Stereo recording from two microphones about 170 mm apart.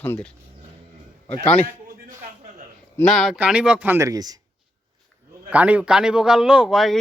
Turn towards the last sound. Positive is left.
turn(degrees=0)  # may be behind; listen again after turning